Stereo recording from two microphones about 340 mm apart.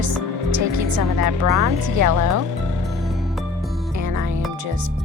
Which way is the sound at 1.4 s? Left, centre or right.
Right.